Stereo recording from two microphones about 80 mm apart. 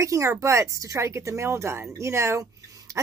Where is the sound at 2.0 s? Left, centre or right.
Right.